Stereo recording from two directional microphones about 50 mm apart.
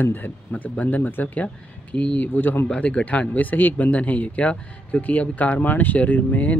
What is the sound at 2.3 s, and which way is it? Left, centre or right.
Speech, left.